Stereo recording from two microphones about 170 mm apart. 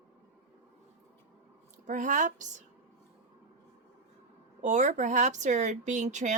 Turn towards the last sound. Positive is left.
turn(degrees=-45)  # may be behind; listen again after turning